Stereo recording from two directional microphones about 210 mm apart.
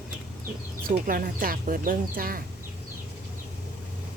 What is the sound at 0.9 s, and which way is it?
Speech, 40° right (ahead or behind).